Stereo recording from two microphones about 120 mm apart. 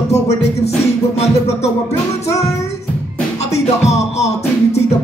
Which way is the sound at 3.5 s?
65° left (ahead or behind).